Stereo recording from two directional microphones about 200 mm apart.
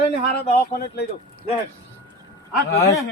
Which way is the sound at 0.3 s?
50° left (ahead or behind).